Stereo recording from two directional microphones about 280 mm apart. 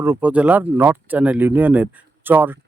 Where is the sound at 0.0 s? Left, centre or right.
Centre.